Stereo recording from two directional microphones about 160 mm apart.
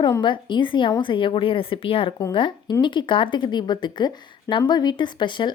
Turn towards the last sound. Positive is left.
turn(degrees=30)  # may be behind; listen again after turning